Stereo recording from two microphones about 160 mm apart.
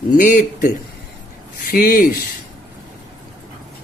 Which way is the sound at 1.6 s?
65° left (ahead or behind).